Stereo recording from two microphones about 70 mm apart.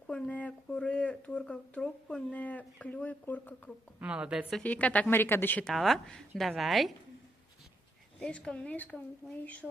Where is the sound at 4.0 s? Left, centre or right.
Centre.